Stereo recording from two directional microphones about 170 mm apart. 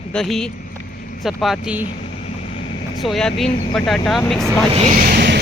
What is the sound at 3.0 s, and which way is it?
Speech, centre (ahead or behind).